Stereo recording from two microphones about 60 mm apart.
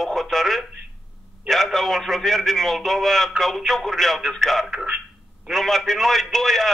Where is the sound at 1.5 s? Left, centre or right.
Centre.